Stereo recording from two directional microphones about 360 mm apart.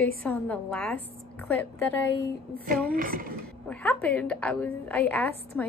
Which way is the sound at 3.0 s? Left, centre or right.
Right.